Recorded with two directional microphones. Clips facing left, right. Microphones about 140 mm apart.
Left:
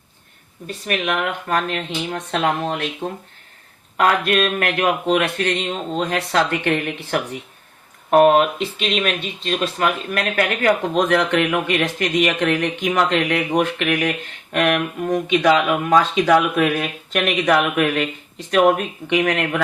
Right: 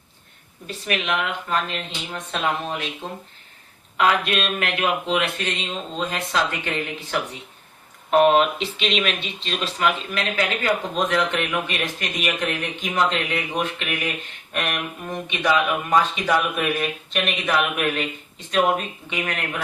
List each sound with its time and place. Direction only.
0.9 s speech: 50° left (ahead or behind)
3.9 s a man's voice: 50° left (ahead or behind)
8.1 s speech: 45° left (ahead or behind); by 14.8 s 70° left (ahead or behind)
15.3 s speech: 90° left; by 19.6 s 70° left (ahead or behind)